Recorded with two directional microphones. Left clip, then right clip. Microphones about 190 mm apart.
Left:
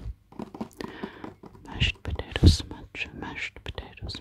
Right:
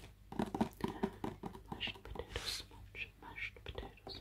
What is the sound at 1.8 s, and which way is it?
Whispering, 45° left (ahead or behind).